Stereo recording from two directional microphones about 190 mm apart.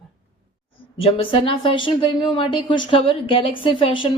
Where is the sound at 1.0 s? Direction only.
30° left (ahead or behind).